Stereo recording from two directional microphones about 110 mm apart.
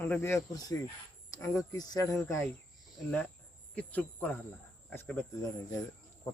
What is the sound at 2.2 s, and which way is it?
Speech, 25° left (ahead or behind).